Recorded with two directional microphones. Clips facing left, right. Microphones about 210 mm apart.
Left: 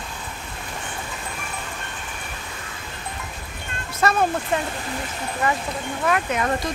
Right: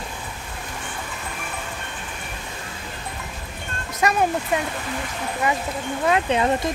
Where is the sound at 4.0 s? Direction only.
15° right (ahead or behind).